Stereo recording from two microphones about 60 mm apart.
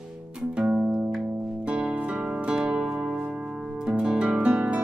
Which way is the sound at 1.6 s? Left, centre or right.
Centre.